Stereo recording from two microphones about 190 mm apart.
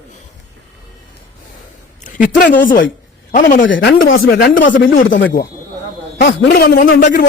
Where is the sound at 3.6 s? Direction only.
75° left (ahead or behind); by 4.3 s 90° left.